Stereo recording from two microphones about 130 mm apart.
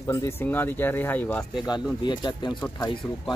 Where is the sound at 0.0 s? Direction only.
25° left (ahead or behind).